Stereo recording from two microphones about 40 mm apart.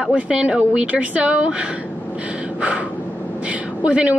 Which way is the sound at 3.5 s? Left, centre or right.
Right.